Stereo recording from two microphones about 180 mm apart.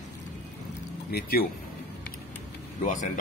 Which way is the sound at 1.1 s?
60° left (ahead or behind).